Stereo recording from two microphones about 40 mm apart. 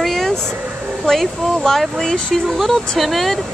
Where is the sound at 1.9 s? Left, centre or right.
Left.